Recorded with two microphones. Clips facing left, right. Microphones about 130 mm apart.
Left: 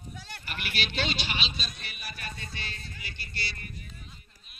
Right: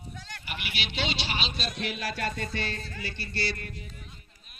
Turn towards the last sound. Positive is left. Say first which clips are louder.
# right 4 dB
turn(degrees=-90)